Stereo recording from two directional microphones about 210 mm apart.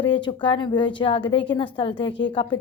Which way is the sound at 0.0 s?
25° left (ahead or behind).